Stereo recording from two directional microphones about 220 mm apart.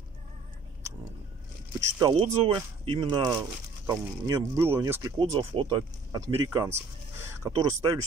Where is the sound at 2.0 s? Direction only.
20° right (ahead or behind).